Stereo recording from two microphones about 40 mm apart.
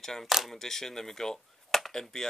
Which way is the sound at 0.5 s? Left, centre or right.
Centre.